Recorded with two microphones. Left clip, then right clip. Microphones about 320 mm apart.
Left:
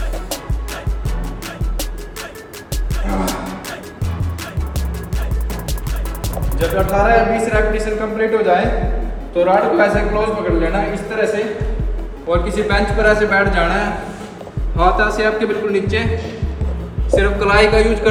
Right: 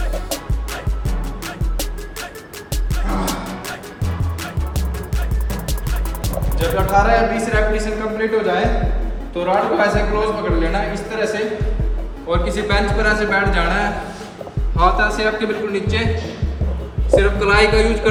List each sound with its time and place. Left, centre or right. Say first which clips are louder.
2.9 s music: left 2 dB; centre
6.2 s music: left 3 dB; centre
6.8 s a man's voice: left 1 dB; centre
12.3 s a man's voice: left 2 dB; centre
17.2 s a man's voice: left 1 dB; centre